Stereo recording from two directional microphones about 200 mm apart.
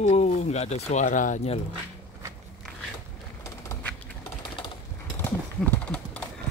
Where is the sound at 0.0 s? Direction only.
35° left (ahead or behind).